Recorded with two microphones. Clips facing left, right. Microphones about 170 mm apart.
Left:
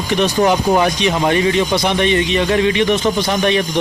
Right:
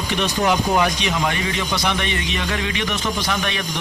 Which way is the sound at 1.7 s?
25° left (ahead or behind).